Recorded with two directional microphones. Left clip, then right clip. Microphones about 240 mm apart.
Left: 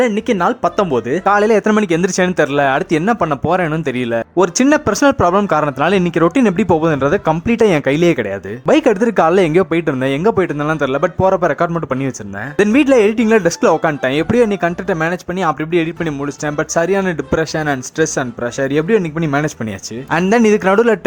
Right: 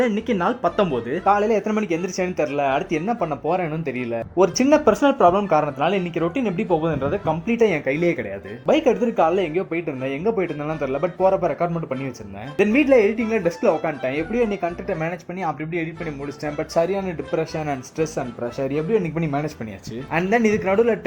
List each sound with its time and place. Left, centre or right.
0.3 s speech: centre